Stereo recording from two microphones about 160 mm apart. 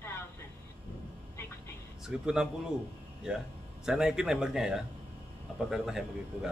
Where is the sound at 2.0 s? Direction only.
5° right (ahead or behind).